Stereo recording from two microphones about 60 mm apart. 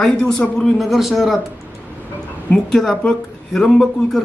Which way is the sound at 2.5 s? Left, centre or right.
Centre.